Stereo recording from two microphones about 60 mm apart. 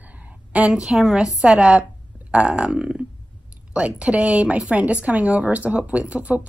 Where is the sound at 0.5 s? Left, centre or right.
Centre.